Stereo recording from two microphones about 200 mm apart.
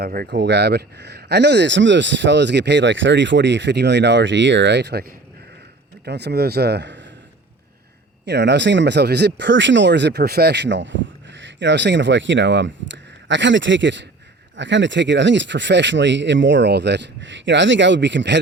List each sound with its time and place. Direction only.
0.0 s speech: 50° right (ahead or behind)
8.2 s speech: 60° right (ahead or behind)